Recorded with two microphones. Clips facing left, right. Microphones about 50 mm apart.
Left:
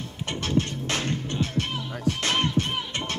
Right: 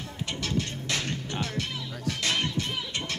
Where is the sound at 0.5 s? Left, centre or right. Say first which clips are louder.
Left 6 dB; left.